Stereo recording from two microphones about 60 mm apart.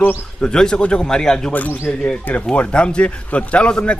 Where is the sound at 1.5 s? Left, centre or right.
Left.